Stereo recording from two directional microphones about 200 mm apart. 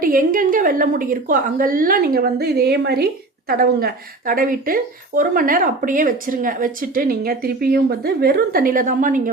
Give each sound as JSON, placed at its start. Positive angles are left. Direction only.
{"t": 0.0, "sound": "a woman's voice", "side_deg": -45}